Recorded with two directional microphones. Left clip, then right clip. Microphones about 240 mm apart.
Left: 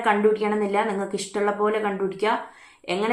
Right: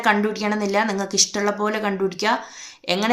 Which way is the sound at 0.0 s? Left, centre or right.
Right.